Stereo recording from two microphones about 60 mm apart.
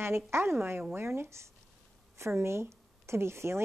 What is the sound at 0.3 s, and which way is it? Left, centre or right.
A woman's voice, right.